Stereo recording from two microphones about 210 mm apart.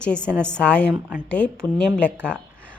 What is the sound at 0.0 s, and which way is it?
A woman's voice, 5° left (ahead or behind).